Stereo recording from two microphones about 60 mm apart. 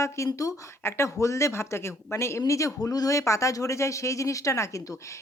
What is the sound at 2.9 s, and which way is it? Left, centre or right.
Speech, left.